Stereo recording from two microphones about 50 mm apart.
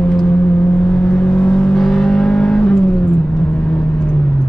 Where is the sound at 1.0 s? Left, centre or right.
Centre.